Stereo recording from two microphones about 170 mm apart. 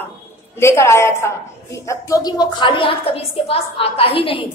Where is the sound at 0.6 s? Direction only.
15° left (ahead or behind).